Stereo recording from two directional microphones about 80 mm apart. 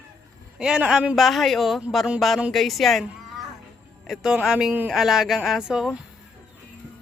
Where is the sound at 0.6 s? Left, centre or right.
Centre.